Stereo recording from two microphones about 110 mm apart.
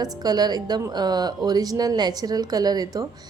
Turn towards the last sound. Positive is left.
turn(degrees=-35)  # may be behind; listen again after turning